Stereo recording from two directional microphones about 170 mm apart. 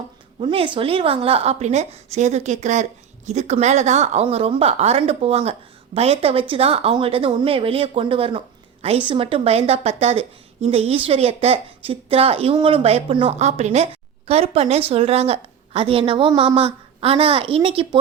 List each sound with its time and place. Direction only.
0.3 s a woman's voice: 30° right (ahead or behind)